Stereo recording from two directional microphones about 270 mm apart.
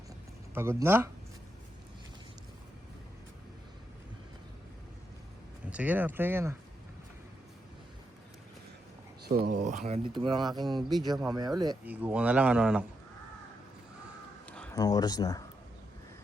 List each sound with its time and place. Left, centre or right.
0.5 s speech: centre
5.7 s speech: centre
9.2 s speech: right; by 10.8 s centre
10.8 s speech: centre
11.3 s speech: centre
14.4 s a sound: centre